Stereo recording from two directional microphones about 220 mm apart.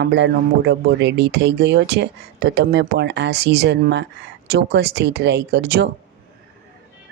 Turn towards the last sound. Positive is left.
turn(degrees=-45)  # may be behind; listen again after turning